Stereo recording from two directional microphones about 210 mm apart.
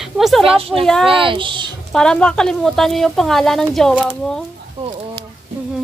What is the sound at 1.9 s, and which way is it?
A woman's voice, 5° left (ahead or behind).